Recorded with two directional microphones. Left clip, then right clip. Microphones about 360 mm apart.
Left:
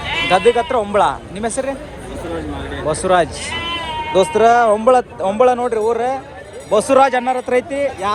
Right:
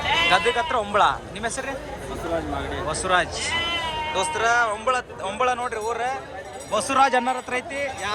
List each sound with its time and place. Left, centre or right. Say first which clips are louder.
0.0 s sheep: left 1 dB; right
0.5 s speech: left 6 dB; centre
2.8 s speech: left 8 dB; centre
3.4 s sheep: left 2 dB; right
4.1 s speech: left 11 dB; centre